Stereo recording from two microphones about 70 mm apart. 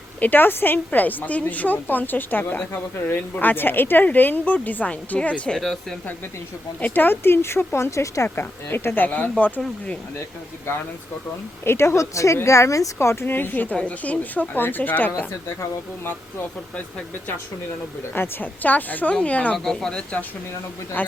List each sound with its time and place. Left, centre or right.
0.2 s speech: left
5.5 s speech: centre
6.7 s speech: left
8.4 s speech: left
9.0 s speech: left
11.6 s a woman's voice: left
13.2 s speech: left
18.1 s speech: left
19.5 s speech: centre
21.0 s a man's voice: left